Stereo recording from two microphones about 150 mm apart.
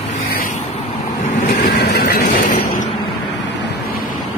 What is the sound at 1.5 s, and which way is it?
Vehicle, 80° left.